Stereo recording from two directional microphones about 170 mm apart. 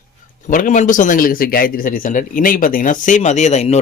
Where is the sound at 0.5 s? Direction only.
50° left (ahead or behind).